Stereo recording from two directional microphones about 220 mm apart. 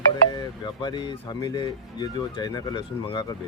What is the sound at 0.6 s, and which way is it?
Speech, 20° left (ahead or behind).